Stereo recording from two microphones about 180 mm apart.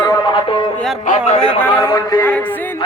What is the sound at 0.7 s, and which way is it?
Music, centre (ahead or behind).